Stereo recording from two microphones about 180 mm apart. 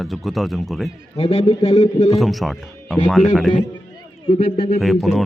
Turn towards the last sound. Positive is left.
turn(degrees=0)  # may be behind; listen again after turning